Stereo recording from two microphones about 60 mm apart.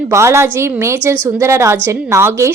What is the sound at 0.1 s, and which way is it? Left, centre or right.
A woman's voice, right.